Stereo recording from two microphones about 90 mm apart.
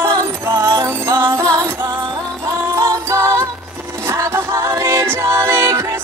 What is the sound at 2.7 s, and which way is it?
Music, 35° right (ahead or behind).